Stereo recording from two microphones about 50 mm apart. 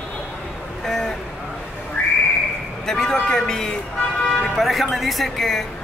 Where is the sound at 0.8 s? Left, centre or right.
Centre.